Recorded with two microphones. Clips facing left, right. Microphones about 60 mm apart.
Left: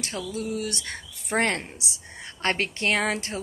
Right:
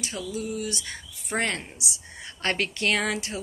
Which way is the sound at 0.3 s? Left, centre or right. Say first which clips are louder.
Even; left.